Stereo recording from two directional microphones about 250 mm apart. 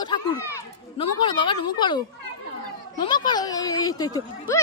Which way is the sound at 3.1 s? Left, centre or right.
Centre.